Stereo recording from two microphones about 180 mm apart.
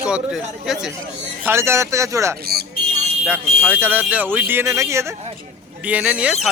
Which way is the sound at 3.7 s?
10° right (ahead or behind).